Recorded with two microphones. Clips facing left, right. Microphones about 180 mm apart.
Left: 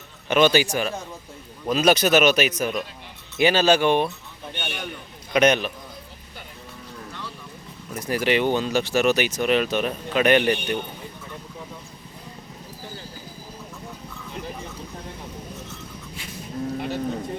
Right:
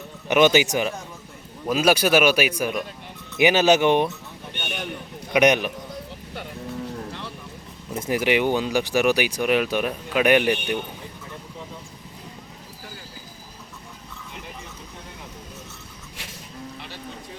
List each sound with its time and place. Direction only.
0.3 s speech: 15° right (ahead or behind)
1.6 s speech: 5° right (ahead or behind)
5.3 s speech: 15° right (ahead or behind)
6.9 s vehicle: 30° right (ahead or behind)
7.9 s speech: 20° right (ahead or behind)
16.7 s a sound: 50° left (ahead or behind)